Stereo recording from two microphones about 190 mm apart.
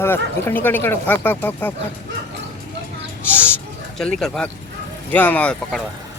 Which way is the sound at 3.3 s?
10° left (ahead or behind).